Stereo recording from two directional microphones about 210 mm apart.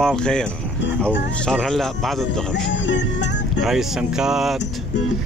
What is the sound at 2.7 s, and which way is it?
Music, 60° left (ahead or behind).